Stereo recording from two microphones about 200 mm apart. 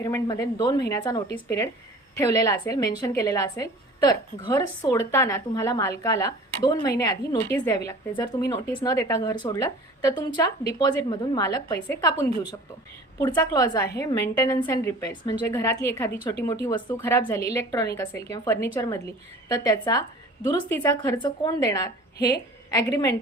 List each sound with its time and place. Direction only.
0.0 s a woman's voice: 15° left (ahead or behind)